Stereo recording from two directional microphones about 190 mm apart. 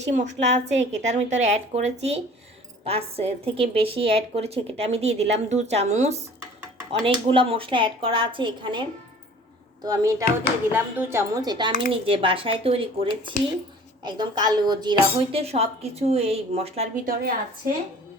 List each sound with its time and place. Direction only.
0.1 s a woman's voice: 40° right (ahead or behind)
7.3 s a woman's voice: 30° right (ahead or behind)
17.1 s a woman's voice: 50° right (ahead or behind)